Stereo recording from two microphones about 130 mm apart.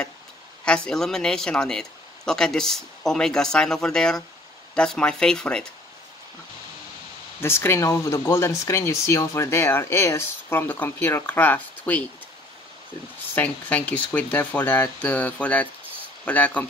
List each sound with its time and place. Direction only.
0.7 s speech: 5° left (ahead or behind)
7.3 s speech: 20° left (ahead or behind)
13.3 s speech: 15° left (ahead or behind)